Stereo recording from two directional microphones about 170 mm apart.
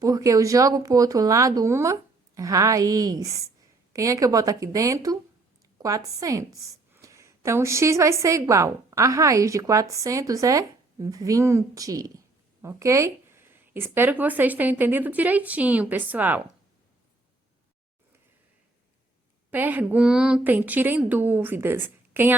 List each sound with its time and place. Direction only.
0.0 s a woman's voice: 20° right (ahead or behind)
6.1 s a woman's voice: 20° right (ahead or behind)
19.5 s speech: 10° right (ahead or behind)